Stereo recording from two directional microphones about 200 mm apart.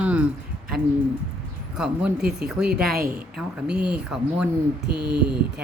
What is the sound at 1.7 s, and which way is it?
Speech, 5° right (ahead or behind).